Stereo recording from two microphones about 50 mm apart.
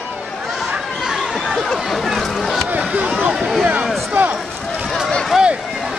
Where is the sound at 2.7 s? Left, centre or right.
Right.